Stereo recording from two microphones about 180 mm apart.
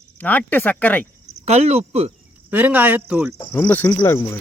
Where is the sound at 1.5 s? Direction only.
35° right (ahead or behind).